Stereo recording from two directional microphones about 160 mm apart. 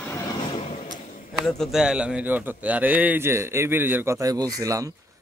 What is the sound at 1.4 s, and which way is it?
A man's voice, centre (ahead or behind).